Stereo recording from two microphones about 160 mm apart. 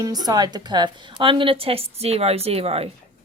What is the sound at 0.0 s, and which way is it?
A woman's voice, 25° right (ahead or behind).